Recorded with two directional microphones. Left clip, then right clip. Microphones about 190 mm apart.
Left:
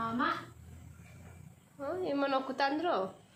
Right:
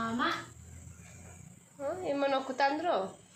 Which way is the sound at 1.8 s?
Centre (ahead or behind).